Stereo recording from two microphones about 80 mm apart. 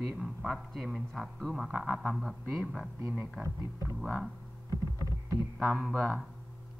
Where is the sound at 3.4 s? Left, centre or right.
Right.